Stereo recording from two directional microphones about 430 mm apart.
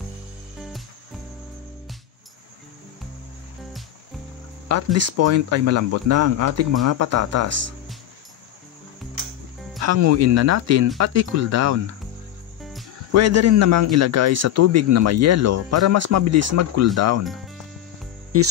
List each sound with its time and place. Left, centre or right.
4.9 s a man's voice: right
9.8 s a man's voice: right
13.1 s a man's voice: right
18.3 s a man's voice: right